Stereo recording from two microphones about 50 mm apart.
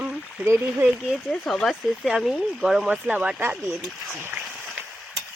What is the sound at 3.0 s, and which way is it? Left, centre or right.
Speech, right.